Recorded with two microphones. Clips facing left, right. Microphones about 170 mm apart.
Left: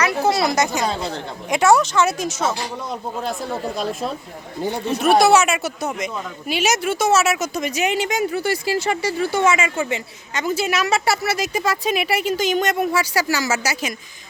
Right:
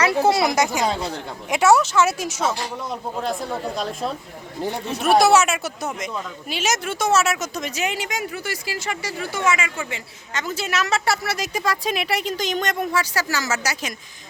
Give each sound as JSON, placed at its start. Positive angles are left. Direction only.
{"t": 0.3, "sound": "speech", "side_deg": -20}
{"t": 2.4, "sound": "speech", "side_deg": 5}
{"t": 10.3, "sound": "a woman's voice", "side_deg": 10}